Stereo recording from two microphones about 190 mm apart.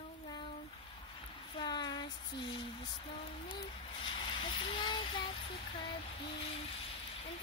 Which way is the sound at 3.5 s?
25° left (ahead or behind).